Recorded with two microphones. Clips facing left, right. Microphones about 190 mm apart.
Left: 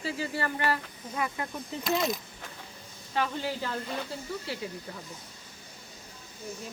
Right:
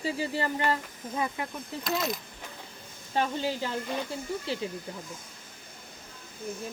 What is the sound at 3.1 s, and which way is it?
Speech, 25° right (ahead or behind).